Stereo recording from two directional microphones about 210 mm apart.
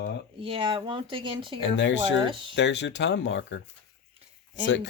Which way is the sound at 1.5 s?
60° left (ahead or behind).